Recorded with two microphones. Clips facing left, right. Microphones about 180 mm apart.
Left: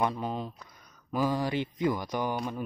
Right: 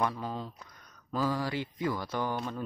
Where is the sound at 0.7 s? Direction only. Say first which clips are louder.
Left 3 dB; 5° left (ahead or behind).